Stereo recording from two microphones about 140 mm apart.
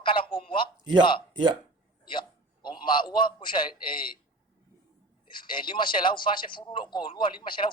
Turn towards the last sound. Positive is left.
turn(degrees=35)  # may be behind; listen again after turning